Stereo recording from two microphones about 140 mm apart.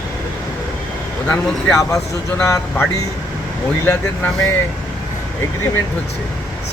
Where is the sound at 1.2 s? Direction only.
20° left (ahead or behind).